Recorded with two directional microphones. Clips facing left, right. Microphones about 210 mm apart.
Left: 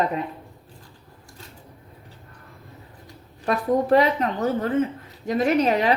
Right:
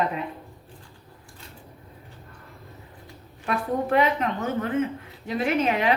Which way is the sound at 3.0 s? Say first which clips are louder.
Left 6 dB; 35° left (ahead or behind).